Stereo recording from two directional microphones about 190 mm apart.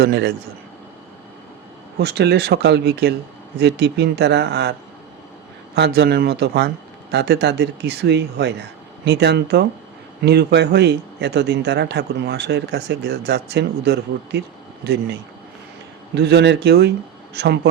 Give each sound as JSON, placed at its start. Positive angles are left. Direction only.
{"t": 0.0, "sound": "speech", "side_deg": -55}
{"t": 2.0, "sound": "speech", "side_deg": -60}
{"t": 5.7, "sound": "speech", "side_deg": -60}
{"t": 16.1, "sound": "speech", "side_deg": -60}